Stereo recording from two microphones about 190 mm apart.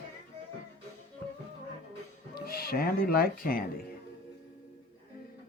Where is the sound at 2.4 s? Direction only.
50° left (ahead or behind).